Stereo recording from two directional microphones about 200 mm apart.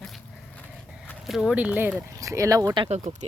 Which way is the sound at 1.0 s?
Centre (ahead or behind).